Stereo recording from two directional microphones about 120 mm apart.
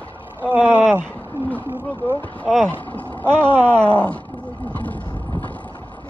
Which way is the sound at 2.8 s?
15° left (ahead or behind).